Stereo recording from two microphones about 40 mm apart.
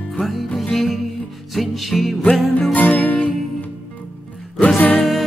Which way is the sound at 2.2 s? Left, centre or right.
Centre.